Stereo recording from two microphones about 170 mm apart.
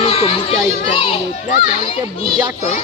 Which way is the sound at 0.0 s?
35° left (ahead or behind).